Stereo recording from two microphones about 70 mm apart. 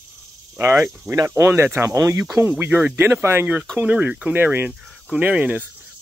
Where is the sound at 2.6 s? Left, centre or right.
Right.